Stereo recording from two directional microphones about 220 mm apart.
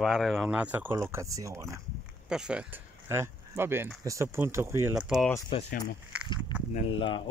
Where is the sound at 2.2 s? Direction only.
5° right (ahead or behind).